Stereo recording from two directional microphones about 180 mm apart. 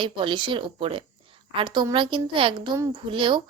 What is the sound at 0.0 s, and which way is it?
A woman's voice, 25° right (ahead or behind).